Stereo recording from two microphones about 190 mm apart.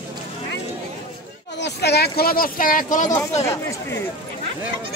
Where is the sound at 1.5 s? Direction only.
60° left (ahead or behind).